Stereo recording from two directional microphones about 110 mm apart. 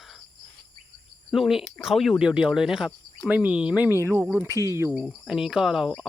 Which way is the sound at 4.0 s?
25° right (ahead or behind).